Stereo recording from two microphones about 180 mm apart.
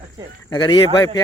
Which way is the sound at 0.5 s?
25° left (ahead or behind).